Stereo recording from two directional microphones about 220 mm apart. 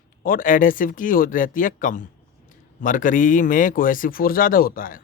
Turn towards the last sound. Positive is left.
turn(degrees=40)  # may be behind; listen again after turning